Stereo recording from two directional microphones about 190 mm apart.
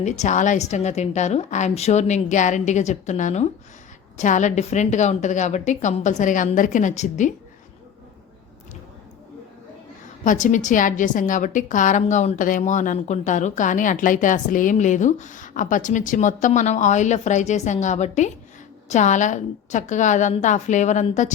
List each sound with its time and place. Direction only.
0.0 s a woman's voice: 40° left (ahead or behind)
10.2 s a woman's voice: 40° left (ahead or behind)